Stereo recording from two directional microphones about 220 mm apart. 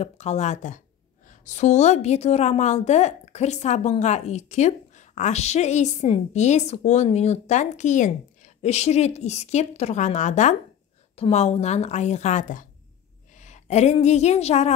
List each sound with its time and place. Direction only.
0.0 s a woman's voice: 30° left (ahead or behind)